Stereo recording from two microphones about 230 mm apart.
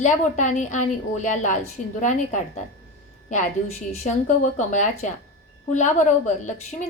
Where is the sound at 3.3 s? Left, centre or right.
Left.